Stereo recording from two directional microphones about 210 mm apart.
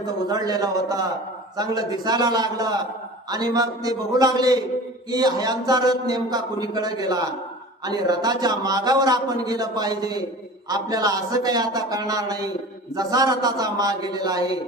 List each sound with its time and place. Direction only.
0.0 s a man's voice: 20° right (ahead or behind)